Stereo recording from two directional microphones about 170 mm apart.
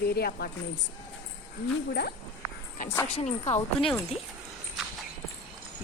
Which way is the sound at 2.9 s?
10° left (ahead or behind).